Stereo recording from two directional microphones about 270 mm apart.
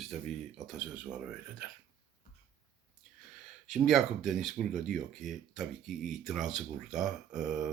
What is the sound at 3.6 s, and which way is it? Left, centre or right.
Speech, centre.